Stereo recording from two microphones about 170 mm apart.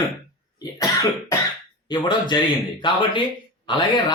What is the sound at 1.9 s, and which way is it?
Speech, 25° left (ahead or behind).